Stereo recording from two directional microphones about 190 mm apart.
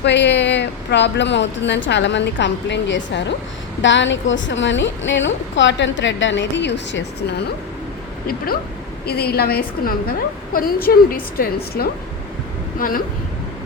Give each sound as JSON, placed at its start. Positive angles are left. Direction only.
{"t": 0.0, "sound": "a woman's voice", "side_deg": 65}
{"t": 9.0, "sound": "a woman's voice", "side_deg": 55}